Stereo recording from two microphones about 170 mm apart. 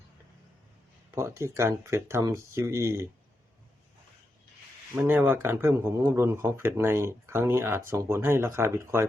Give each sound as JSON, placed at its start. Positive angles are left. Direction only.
{"t": 1.1, "sound": "speech", "side_deg": -15}
{"t": 4.9, "sound": "speech", "side_deg": -10}